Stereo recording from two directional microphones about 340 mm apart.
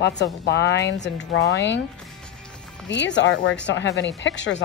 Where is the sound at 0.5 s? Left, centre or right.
Left.